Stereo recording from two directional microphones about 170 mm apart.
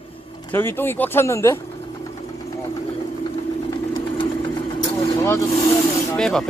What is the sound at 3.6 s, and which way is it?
Vehicle, 25° left (ahead or behind).